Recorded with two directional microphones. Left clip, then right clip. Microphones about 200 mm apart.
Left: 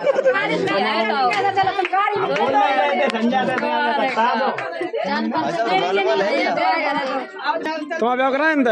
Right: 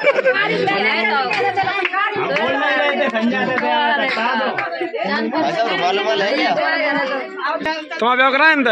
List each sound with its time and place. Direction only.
0.0 s chatter: 10° left (ahead or behind)
5.6 s speech: 40° left (ahead or behind)
8.0 s a man's voice: 10° left (ahead or behind)